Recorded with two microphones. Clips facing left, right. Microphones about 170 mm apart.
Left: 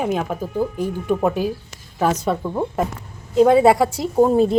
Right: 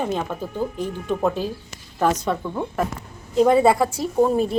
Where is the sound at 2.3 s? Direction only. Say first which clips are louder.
Left 3 dB; 25° left (ahead or behind).